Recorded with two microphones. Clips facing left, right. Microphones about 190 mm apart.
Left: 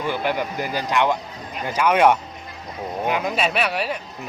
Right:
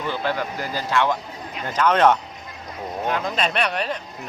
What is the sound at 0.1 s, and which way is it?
Speech, 15° left (ahead or behind).